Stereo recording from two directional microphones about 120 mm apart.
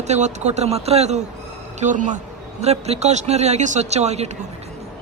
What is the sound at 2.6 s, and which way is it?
Speech, 60° right (ahead or behind).